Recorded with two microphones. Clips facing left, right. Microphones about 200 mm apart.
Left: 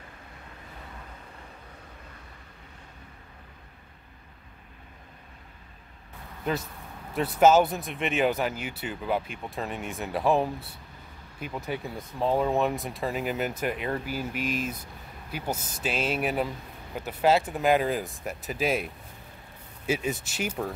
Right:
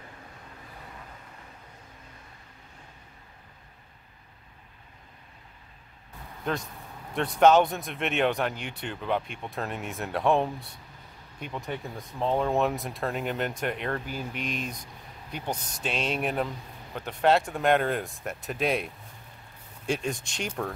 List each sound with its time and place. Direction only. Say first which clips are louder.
6.4 s speech: left 1 dB; 5° left (ahead or behind)
19.9 s speech: left 1 dB; 5° left (ahead or behind)